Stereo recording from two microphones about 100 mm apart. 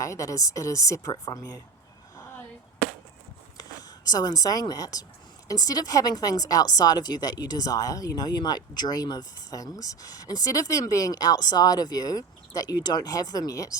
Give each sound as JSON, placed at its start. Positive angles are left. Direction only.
{"t": 0.0, "sound": "speech", "side_deg": 30}
{"t": 3.6, "sound": "a sound", "side_deg": 40}
{"t": 4.7, "sound": "speech", "side_deg": 35}